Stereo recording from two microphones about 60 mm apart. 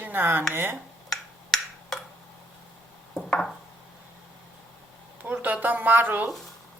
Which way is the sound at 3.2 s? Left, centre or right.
Centre.